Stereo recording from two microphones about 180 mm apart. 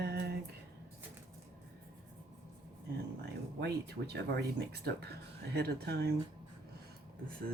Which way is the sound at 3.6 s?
65° right (ahead or behind).